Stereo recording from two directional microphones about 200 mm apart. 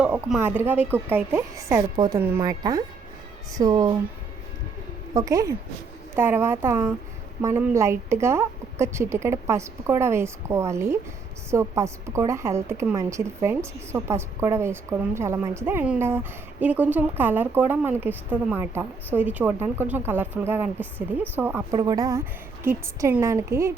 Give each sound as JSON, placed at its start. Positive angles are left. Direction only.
{"t": 0.0, "sound": "a woman's voice", "side_deg": -5}
{"t": 5.1, "sound": "a woman's voice", "side_deg": -15}